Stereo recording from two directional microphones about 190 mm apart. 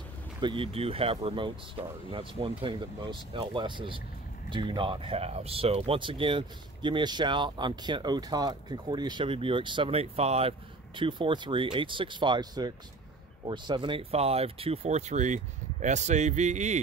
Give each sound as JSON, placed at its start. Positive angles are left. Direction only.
{"t": 0.4, "sound": "speech", "side_deg": -25}